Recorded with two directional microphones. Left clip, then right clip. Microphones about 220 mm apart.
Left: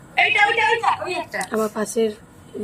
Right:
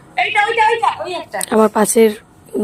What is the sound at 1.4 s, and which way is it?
Speech, 50° right (ahead or behind).